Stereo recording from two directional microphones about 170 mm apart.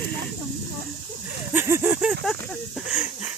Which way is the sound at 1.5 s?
15° right (ahead or behind).